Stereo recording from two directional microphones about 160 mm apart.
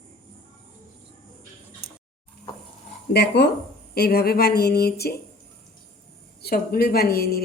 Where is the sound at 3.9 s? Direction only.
80° left.